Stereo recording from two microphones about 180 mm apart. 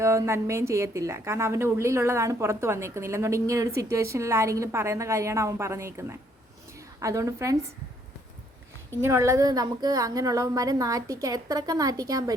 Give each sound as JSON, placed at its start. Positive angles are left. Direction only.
{"t": 0.0, "sound": "a woman's voice", "side_deg": -15}
{"t": 9.0, "sound": "a woman's voice", "side_deg": -15}